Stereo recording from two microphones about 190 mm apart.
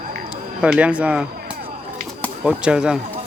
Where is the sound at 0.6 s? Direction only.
5° right (ahead or behind).